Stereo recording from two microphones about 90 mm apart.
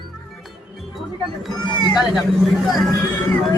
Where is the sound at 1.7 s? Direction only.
60° left (ahead or behind).